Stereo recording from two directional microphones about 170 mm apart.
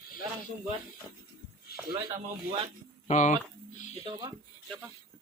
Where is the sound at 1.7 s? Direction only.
65° left (ahead or behind).